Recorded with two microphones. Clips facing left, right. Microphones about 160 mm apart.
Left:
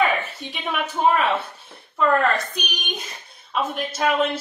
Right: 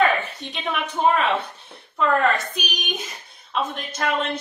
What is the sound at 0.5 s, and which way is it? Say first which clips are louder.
A woman's voice: even; 5° left (ahead or behind).